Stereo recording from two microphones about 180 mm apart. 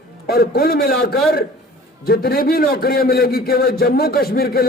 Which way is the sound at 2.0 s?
60° left (ahead or behind).